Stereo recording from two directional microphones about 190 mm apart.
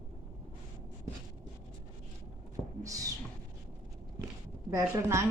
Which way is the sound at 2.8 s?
20° right (ahead or behind).